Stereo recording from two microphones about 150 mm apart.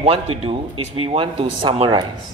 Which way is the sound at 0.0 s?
40° right (ahead or behind).